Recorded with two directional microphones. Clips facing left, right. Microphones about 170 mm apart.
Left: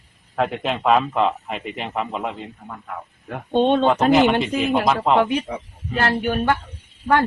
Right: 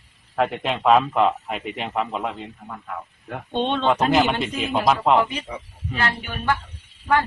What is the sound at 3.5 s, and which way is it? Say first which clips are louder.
Speech: left 6 dB; 45° left (ahead or behind).